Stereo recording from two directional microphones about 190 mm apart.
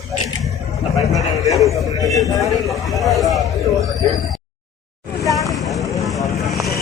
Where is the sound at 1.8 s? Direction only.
20° right (ahead or behind).